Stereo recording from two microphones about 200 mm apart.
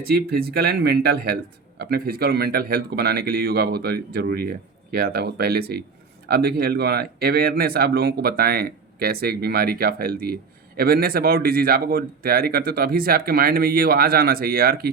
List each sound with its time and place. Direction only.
0.0 s speech: 50° right (ahead or behind)